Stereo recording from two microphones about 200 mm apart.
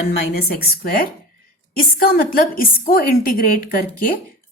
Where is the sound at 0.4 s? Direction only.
50° left (ahead or behind).